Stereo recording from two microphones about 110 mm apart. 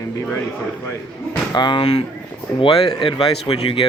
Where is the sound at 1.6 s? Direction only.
40° left (ahead or behind).